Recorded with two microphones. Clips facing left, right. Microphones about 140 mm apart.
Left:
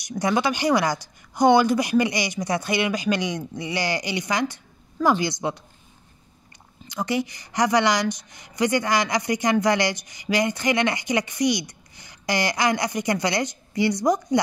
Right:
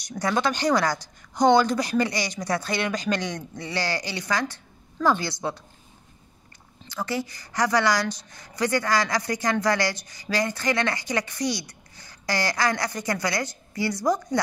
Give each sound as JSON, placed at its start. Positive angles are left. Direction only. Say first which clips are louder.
{"t": 0.0, "sound": "a woman's voice", "louder": "left 2 dB", "side_deg": 10}
{"t": 6.9, "sound": "a woman's voice", "louder": "left 4 dB", "side_deg": 15}